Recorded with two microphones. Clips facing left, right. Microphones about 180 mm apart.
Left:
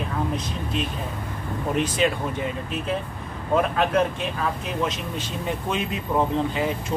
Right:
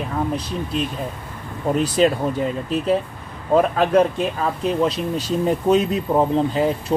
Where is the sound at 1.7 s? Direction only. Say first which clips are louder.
Right 6 dB; 35° right (ahead or behind).